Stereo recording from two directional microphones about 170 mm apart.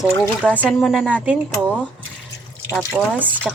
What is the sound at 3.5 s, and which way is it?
Speech, 5° right (ahead or behind).